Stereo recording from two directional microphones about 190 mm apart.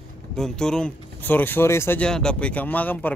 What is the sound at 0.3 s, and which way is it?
Speech, 5° left (ahead or behind).